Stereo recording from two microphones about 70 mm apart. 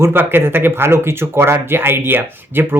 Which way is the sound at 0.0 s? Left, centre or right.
Right.